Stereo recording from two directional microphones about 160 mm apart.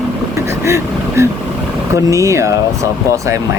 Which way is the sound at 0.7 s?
15° right (ahead or behind).